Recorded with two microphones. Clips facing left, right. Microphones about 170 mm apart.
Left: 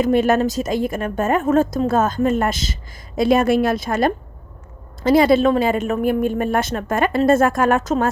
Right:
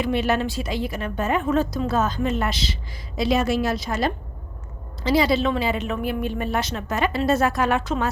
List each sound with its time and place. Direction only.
0.0 s a woman's voice: 45° left (ahead or behind)